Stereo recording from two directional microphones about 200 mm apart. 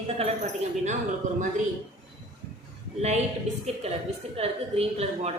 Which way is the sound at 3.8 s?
30° right (ahead or behind).